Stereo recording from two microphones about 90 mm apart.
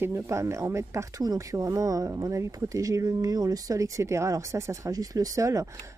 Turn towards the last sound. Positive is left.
turn(degrees=-35)  # may be behind; listen again after turning